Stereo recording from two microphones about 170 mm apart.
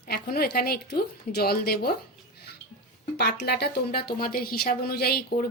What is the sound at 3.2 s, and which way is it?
Speech, 75° left (ahead or behind).